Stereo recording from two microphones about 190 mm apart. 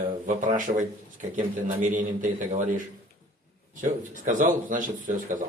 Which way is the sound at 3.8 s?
45° right (ahead or behind).